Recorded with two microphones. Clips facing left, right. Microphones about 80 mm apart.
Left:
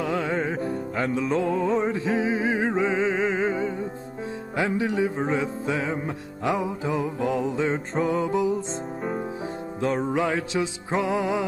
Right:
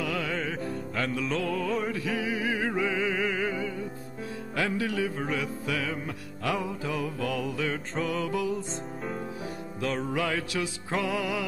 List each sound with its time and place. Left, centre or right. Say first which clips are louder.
0.0 s music: left 5 dB; left
0.7 s music: left 5 dB; centre
1.2 s music: left 6 dB; left
9.8 s music: left 5 dB; left